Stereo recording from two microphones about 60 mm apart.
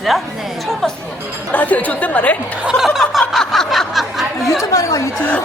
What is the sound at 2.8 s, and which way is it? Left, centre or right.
Snicker, centre.